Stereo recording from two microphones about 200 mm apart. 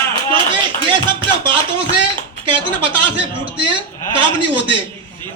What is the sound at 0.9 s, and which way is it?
Speech, 25° right (ahead or behind).